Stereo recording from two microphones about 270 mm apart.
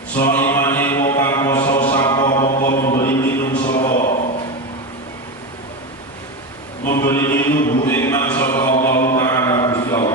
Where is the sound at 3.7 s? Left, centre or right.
Left.